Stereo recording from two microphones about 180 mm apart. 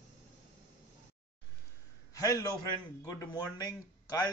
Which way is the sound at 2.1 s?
20° left (ahead or behind).